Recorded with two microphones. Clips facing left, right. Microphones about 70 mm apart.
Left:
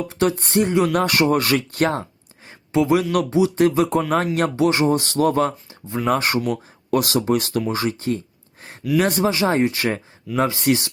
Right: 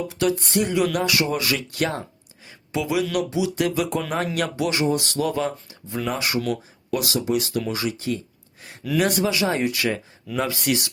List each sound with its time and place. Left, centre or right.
0.1 s speech: left
0.9 s speech: left